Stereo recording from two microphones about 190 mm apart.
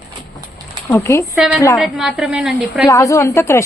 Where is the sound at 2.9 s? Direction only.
15° left (ahead or behind).